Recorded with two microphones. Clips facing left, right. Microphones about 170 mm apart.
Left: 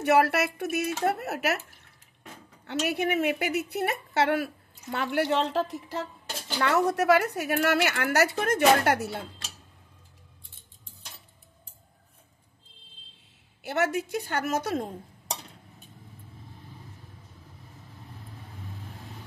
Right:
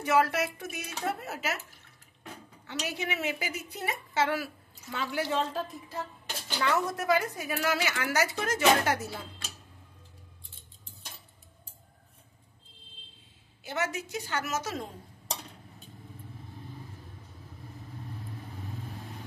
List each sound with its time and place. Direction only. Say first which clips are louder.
0.0 s speech: left 4 dB; 65° left (ahead or behind)
2.6 s a woman's voice: left 8 dB; 55° left (ahead or behind); by 6.0 s 80° left
6.6 s a woman's voice: left 5 dB; 65° left (ahead or behind)
13.6 s a woman's voice: left 6 dB; 65° left (ahead or behind)